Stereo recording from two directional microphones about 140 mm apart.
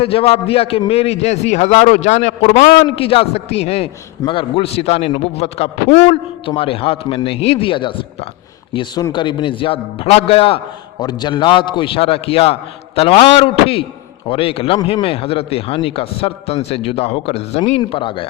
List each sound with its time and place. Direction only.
0.0 s a man's voice: 45° left (ahead or behind); by 2.8 s 60° left (ahead or behind)
2.8 s a man's voice: 40° left (ahead or behind)
11.0 s a man's voice: 30° left (ahead or behind)